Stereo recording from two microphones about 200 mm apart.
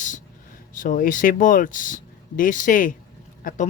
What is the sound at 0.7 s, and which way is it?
Speech, 40° left (ahead or behind).